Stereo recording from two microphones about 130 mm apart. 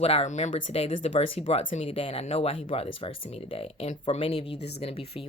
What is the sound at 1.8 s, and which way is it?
Speech, 45° left (ahead or behind).